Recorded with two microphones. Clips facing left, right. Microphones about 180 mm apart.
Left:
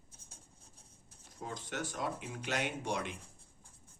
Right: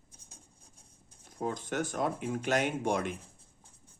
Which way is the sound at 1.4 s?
50° right (ahead or behind).